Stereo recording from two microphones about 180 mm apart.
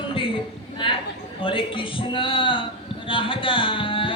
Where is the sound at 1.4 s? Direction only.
30° left (ahead or behind).